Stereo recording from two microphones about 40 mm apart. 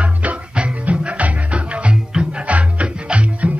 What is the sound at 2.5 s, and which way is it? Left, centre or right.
Music, right.